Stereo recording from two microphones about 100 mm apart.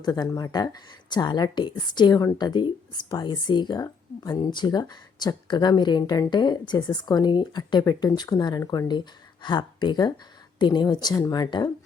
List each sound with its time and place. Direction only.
0.0 s speech: 40° left (ahead or behind)